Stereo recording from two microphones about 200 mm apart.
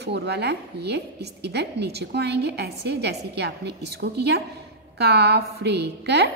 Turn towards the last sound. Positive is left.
turn(degrees=-55)  # may be behind; listen again after turning